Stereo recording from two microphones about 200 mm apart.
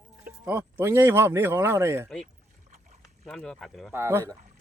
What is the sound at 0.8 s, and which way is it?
Speech, 10° right (ahead or behind).